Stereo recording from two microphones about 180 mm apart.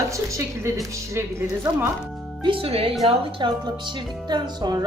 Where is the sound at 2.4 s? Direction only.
30° right (ahead or behind).